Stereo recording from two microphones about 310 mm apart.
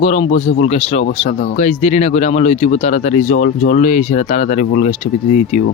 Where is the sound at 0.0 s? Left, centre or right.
Centre.